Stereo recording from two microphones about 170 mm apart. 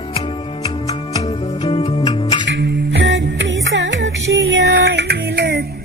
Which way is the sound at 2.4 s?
90° right.